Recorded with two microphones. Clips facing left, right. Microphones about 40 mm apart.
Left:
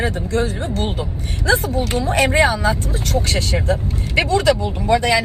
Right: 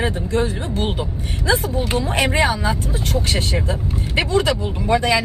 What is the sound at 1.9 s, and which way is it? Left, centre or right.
Speech, right.